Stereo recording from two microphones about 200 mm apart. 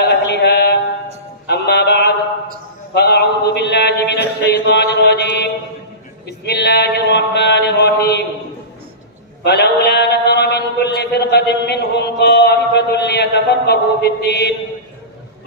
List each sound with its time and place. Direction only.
0.0 s mantra: 55° left (ahead or behind)
1.5 s music: 55° left (ahead or behind)
2.9 s a sound: 55° left (ahead or behind)
4.6 s mantra: 55° left (ahead or behind)
9.4 s chant: 55° left (ahead or behind)